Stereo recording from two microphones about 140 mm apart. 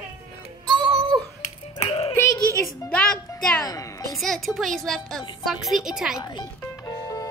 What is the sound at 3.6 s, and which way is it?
Speech, 25° left (ahead or behind).